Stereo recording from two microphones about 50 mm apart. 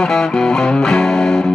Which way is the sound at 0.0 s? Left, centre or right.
Centre.